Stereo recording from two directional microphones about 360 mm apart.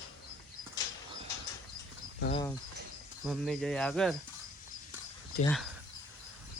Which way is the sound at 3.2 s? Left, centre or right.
Centre.